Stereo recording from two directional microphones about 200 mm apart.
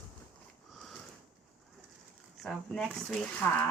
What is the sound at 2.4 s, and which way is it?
Speech, centre (ahead or behind).